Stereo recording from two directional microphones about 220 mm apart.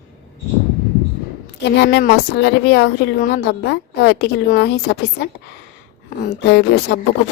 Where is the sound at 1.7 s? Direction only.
50° left (ahead or behind).